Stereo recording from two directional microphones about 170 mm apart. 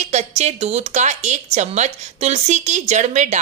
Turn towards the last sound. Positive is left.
turn(degrees=-45)  # may be behind; listen again after turning